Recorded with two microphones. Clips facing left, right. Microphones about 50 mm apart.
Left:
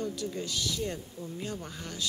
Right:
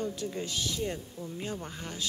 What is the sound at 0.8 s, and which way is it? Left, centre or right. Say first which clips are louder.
Speech: right 1 dB; centre.